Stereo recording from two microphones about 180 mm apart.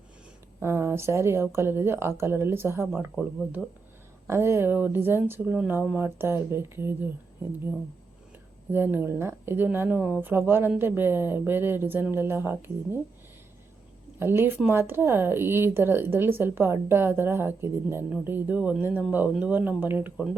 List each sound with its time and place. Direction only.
0.6 s speech: 15° right (ahead or behind)
3.2 s speech: centre (ahead or behind)
4.3 s speech: 15° right (ahead or behind)
8.7 s speech: 10° right (ahead or behind)
14.2 s speech: 10° right (ahead or behind)